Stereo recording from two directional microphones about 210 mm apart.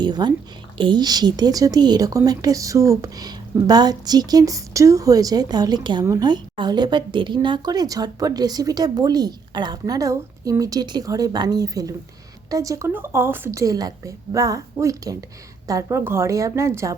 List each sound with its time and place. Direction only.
0.0 s a woman's voice: 20° right (ahead or behind)